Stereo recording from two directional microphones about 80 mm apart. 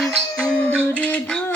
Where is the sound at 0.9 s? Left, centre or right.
Centre.